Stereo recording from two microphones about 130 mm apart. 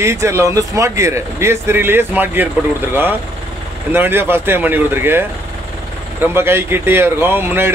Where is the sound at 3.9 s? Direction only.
15° right (ahead or behind).